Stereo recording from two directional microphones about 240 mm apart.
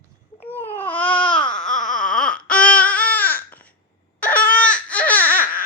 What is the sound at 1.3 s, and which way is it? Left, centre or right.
Baby cry, centre.